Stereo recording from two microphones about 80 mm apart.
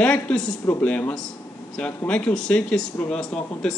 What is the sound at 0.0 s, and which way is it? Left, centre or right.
Speech, centre.